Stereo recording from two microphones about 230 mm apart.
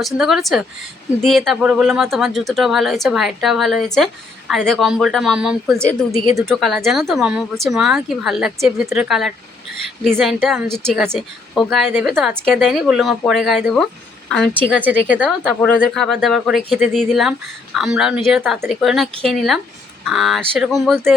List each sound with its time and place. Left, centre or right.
0.0 s speech: centre